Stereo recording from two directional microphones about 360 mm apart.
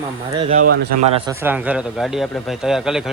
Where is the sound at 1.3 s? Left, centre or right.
Centre.